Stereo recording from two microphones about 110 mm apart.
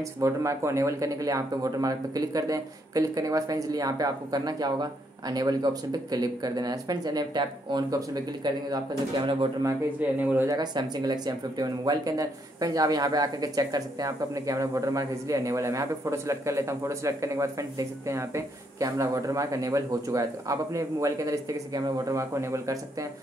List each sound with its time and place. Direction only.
0.2 s speech: 30° right (ahead or behind); by 9.5 s 45° right (ahead or behind)
9.9 s speech: 15° right (ahead or behind)
10.5 s speech: 40° right (ahead or behind)